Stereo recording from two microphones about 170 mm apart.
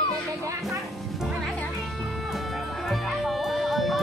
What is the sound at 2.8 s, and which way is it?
Music, centre (ahead or behind).